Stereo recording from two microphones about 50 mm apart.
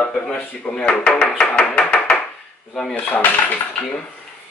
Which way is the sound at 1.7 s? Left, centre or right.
Centre.